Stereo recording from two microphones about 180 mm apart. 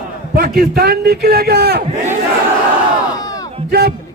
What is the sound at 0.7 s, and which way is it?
A man's voice, 60° right (ahead or behind).